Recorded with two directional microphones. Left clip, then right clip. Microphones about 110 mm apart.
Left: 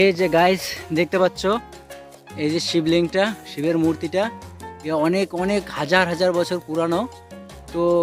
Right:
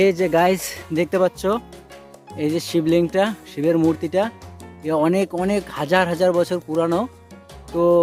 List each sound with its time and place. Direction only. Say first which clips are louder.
0.0 s speech: even; 5° right (ahead or behind)
2.3 s speech: even; 20° right (ahead or behind)
5.4 s speech: even; 15° right (ahead or behind)